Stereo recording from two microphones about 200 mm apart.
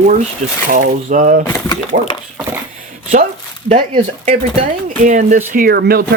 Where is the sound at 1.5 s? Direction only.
20° left (ahead or behind).